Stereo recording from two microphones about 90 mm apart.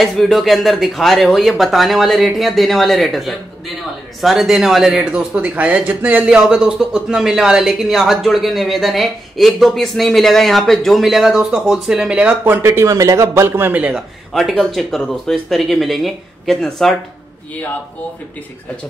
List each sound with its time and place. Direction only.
0.0 s speech: centre (ahead or behind)
5.1 s speech: 15° right (ahead or behind)
6.2 s speech: 5° right (ahead or behind)
12.6 s speech: 35° right (ahead or behind); by 14.0 s 15° right (ahead or behind)
14.3 s speech: centre (ahead or behind)